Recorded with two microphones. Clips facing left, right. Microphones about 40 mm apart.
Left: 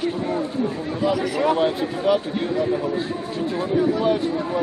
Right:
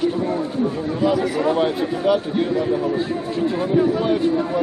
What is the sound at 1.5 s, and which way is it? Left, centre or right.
A man's voice, centre.